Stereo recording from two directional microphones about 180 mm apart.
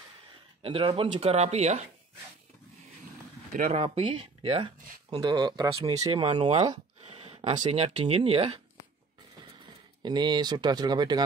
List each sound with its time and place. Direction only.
0.6 s speech: 30° right (ahead or behind)
3.7 s speech: 35° right (ahead or behind)
6.2 s speech: 35° right (ahead or behind)
10.0 s speech: 25° right (ahead or behind)